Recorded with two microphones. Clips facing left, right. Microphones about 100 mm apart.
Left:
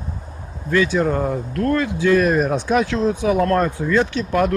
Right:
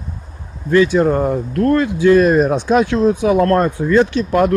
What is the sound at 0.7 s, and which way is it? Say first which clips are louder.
Speech: right 5 dB; 25° right (ahead or behind).